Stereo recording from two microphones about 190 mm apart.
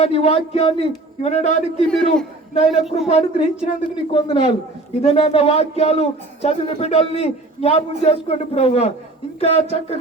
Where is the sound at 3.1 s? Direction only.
30° left (ahead or behind).